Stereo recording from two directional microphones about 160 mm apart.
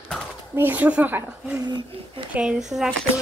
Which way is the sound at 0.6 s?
10° right (ahead or behind).